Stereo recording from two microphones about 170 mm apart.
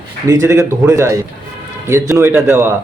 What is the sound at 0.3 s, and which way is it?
A man's voice, 20° right (ahead or behind).